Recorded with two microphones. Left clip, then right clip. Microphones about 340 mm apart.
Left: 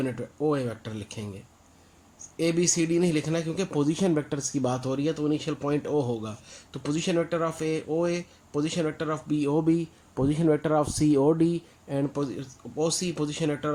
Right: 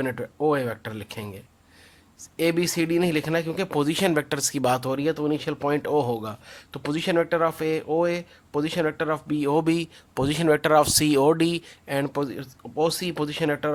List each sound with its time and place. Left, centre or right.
0.4 s speech: right
2.3 s speech: right